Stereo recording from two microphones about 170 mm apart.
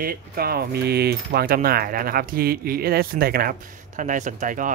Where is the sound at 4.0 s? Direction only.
50° right (ahead or behind).